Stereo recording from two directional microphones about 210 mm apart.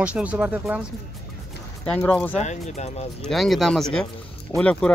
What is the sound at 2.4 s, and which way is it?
Speech, 35° left (ahead or behind).